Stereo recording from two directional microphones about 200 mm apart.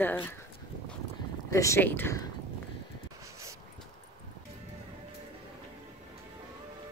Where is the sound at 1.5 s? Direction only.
15° left (ahead or behind).